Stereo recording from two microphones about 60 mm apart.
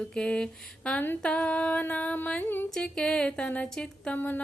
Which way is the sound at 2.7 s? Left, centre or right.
Centre.